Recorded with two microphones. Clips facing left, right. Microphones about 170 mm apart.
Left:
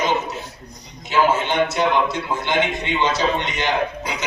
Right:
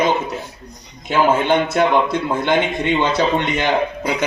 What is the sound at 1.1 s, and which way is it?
A man's voice, 55° right (ahead or behind).